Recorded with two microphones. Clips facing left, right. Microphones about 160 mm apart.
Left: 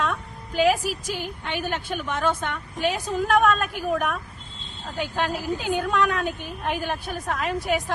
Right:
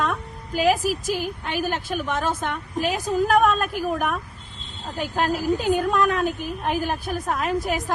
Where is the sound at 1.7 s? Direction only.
40° right (ahead or behind).